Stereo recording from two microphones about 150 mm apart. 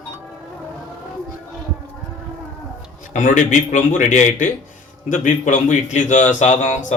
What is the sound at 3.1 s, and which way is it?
A man's voice, 55° left (ahead or behind).